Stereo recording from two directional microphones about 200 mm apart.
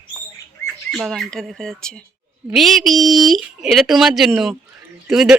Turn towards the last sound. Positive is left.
turn(degrees=0)  # may be behind; listen again after turning